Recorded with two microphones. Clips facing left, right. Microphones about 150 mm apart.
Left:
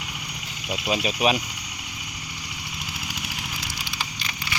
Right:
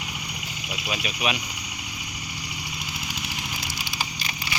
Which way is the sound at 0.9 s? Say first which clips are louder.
Left 6 dB; 35° left (ahead or behind).